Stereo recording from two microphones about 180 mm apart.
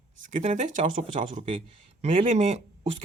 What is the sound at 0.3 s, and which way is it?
A man's voice, 40° right (ahead or behind).